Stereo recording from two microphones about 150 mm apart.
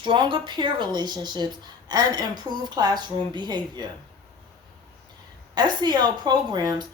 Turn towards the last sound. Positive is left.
turn(degrees=-25)  # may be behind; listen again after turning